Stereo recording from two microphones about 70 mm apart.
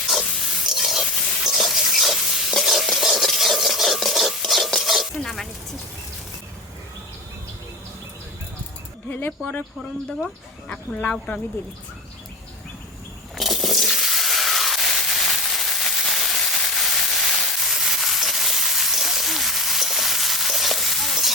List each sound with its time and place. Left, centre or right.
0.3 s pig: centre
0.6 s sizzle: centre
1.5 s stir: centre
9.4 s speech: left
10.7 s speech: centre
13.3 s a sound: centre